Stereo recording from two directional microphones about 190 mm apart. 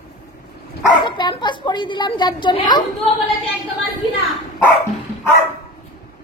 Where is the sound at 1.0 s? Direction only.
25° left (ahead or behind).